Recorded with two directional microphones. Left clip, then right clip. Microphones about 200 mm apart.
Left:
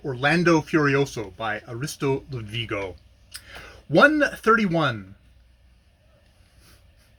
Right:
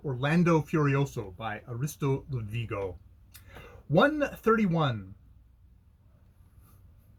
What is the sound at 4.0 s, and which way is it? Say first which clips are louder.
Speech: left 8 dB; 10° left (ahead or behind).